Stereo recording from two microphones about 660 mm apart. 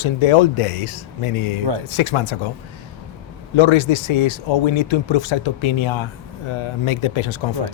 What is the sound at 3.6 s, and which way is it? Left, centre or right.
Speech, left.